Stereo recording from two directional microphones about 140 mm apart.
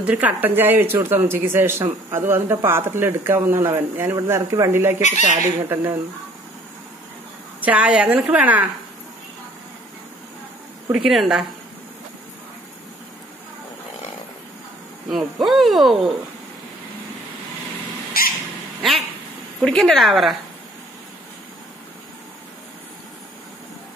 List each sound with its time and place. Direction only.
0.0 s speech: 10° right (ahead or behind)
7.6 s speech: 10° right (ahead or behind)
10.9 s speech: centre (ahead or behind)
15.0 s speech: centre (ahead or behind)
18.1 s cat: 90° left
18.8 s speech: centre (ahead or behind)